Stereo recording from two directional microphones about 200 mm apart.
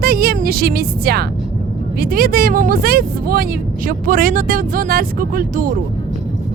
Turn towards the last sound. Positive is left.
turn(degrees=-40)  # may be behind; listen again after turning